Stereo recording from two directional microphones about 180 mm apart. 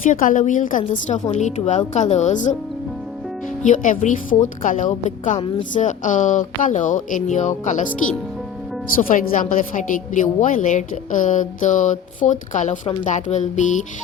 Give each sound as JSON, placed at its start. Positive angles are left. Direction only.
{"t": 0.0, "sound": "a woman's voice", "side_deg": 45}
{"t": 1.3, "sound": "music", "side_deg": 40}
{"t": 3.6, "sound": "a woman's voice", "side_deg": 45}
{"t": 9.0, "sound": "a woman's voice", "side_deg": 45}
{"t": 13.1, "sound": "music", "side_deg": 40}